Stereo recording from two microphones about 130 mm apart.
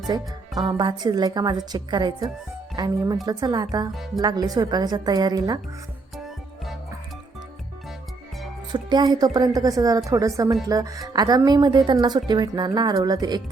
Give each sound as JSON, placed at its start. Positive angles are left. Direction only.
{"t": 0.1, "sound": "speech", "side_deg": -35}
{"t": 3.9, "sound": "speech", "side_deg": 0}
{"t": 4.2, "sound": "speech", "side_deg": -30}
{"t": 8.7, "sound": "speech", "side_deg": -35}